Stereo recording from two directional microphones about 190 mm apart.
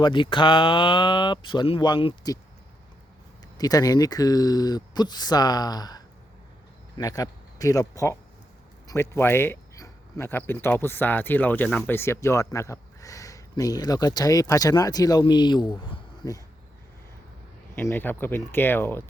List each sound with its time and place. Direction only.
0.0 s speech: 25° left (ahead or behind)
3.6 s speech: 20° left (ahead or behind)
17.7 s speech: 10° left (ahead or behind)